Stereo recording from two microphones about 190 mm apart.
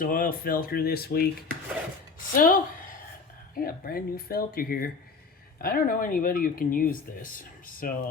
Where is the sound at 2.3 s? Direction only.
45° left (ahead or behind).